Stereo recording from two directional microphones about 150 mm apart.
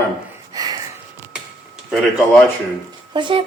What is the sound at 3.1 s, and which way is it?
Speech, 35° right (ahead or behind).